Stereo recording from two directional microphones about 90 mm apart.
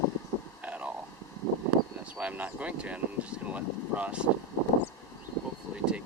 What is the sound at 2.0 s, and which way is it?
Speech, 15° right (ahead or behind).